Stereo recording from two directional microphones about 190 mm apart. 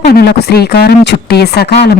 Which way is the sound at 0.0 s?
55° left (ahead or behind).